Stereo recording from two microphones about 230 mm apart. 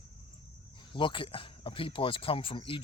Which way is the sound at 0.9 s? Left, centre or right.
Left.